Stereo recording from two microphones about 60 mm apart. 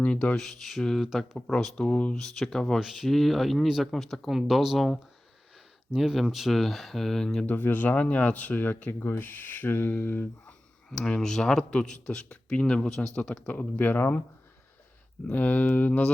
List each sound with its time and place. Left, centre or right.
0.0 s speech: left
0.3 s speech: centre
1.0 s speech: centre
1.5 s speech: centre
2.2 s speech: centre
6.0 s speech: centre
7.4 s speech: left
10.9 s speech: centre
13.5 s speech: left
15.3 s speech: left